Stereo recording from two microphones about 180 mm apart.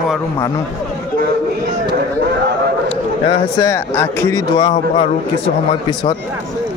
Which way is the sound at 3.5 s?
15° left (ahead or behind).